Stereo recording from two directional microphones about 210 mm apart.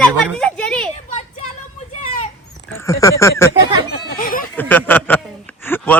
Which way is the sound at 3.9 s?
45° left (ahead or behind).